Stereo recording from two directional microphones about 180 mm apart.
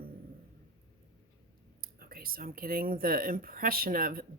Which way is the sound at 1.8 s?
55° right (ahead or behind).